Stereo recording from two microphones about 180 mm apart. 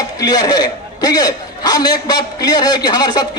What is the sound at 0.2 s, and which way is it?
A man's voice, 20° left (ahead or behind).